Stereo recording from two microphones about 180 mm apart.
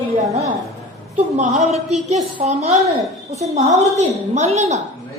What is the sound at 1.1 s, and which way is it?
Speech, 40° right (ahead or behind).